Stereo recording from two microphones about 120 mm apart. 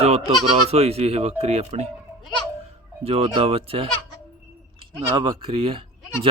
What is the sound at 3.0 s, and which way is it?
Speech, 55° right (ahead or behind).